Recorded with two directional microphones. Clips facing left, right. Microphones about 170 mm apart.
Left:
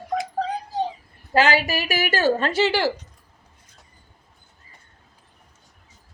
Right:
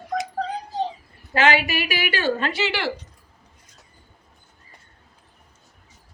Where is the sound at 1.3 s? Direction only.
40° left (ahead or behind).